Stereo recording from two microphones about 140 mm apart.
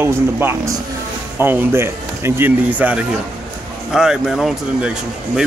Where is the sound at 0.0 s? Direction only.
15° right (ahead or behind).